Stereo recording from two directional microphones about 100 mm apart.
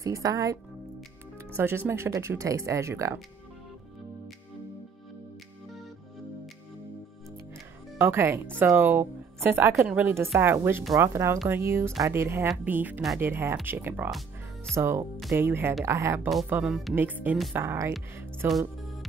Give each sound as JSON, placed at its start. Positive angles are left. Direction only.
{"t": 0.0, "sound": "speech", "side_deg": -35}
{"t": 1.6, "sound": "speech", "side_deg": -25}
{"t": 8.0, "sound": "speech", "side_deg": -25}
{"t": 9.8, "sound": "speech", "side_deg": -10}
{"t": 10.0, "sound": "speech", "side_deg": -25}
{"t": 16.4, "sound": "speech", "side_deg": -15}